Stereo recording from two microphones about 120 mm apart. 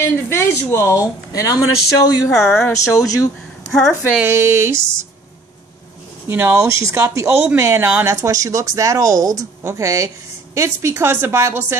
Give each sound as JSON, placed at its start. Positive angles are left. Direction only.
{"t": 0.0, "sound": "speech", "side_deg": 20}
{"t": 2.3, "sound": "a woman's voice", "side_deg": 0}
{"t": 2.6, "sound": "speech", "side_deg": 25}
{"t": 3.7, "sound": "a woman's voice", "side_deg": 5}
{"t": 4.2, "sound": "speech", "side_deg": -20}
{"t": 6.2, "sound": "speech", "side_deg": -20}